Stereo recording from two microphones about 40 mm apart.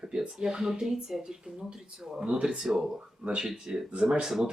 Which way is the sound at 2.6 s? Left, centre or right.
Centre.